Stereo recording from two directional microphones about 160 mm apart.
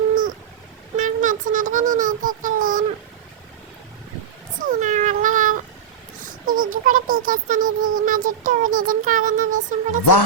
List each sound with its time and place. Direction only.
0.9 s a sound: 55° right (ahead or behind)
4.7 s cat: 50° right (ahead or behind)
6.2 s music: 55° right (ahead or behind)